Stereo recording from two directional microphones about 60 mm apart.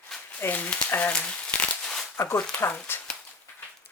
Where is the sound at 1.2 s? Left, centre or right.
Left.